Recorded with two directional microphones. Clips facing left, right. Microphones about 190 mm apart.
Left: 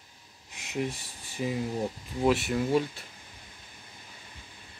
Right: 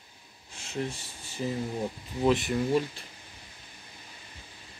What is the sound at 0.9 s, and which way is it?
Speech, 15° left (ahead or behind).